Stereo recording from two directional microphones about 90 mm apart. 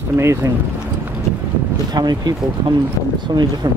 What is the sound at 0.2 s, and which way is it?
Speech, 30° right (ahead or behind).